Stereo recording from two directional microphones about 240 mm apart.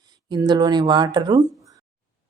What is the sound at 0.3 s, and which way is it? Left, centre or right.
A woman's voice, centre.